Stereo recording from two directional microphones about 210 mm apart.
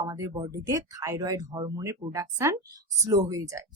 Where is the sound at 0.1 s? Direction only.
20° right (ahead or behind).